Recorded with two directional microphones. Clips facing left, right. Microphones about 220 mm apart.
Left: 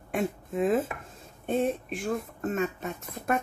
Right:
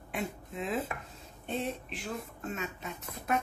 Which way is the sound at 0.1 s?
50° left (ahead or behind).